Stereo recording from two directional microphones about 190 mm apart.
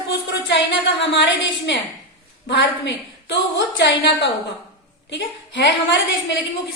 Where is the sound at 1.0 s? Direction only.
70° left (ahead or behind).